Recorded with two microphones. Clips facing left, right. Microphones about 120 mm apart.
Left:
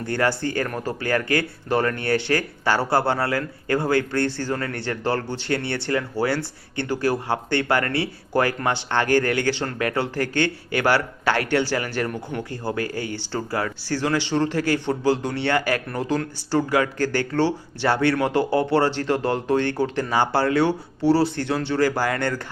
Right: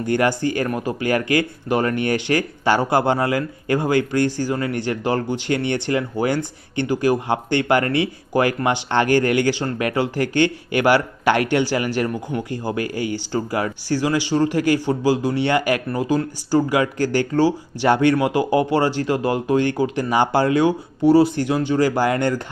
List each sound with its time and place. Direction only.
0.0 s speech: 15° right (ahead or behind)